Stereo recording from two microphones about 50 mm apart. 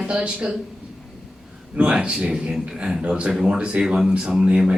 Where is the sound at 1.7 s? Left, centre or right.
Right.